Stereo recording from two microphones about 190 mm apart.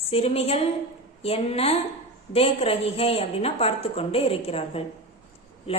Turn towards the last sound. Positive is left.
turn(degrees=30)  # may be behind; listen again after turning